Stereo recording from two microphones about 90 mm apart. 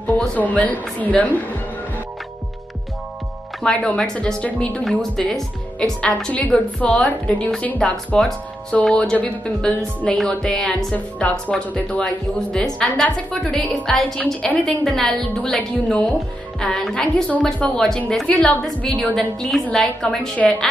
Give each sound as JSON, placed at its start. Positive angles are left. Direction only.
{"t": 0.0, "sound": "a woman's voice", "side_deg": 15}
{"t": 3.6, "sound": "a woman's voice", "side_deg": 10}
{"t": 14.2, "sound": "a woman's voice", "side_deg": 15}
{"t": 14.9, "sound": "a woman's voice", "side_deg": 5}
{"t": 19.1, "sound": "a woman's voice", "side_deg": 5}